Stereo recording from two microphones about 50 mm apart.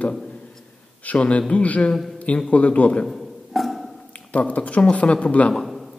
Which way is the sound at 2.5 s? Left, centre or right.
Left.